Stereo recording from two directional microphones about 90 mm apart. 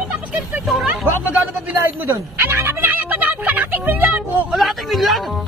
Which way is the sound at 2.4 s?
30° right (ahead or behind).